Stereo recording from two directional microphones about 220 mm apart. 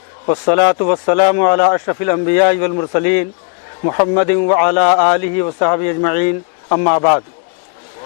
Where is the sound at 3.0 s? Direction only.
15° left (ahead or behind).